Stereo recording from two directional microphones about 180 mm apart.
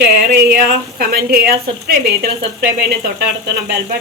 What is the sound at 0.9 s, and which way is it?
A woman's voice, 60° right (ahead or behind).